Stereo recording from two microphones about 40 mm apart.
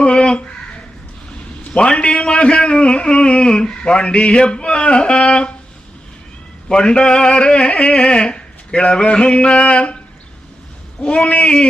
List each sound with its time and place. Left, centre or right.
0.0 s a sound: left
1.7 s a man's voice: left
6.7 s a man's voice: left
11.0 s a man's voice: left